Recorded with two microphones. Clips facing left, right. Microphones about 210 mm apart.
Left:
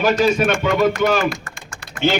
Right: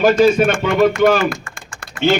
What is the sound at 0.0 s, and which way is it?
A man's voice, 45° right (ahead or behind).